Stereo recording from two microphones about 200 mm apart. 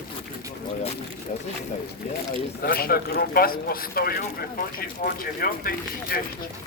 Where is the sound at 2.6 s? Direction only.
50° left (ahead or behind).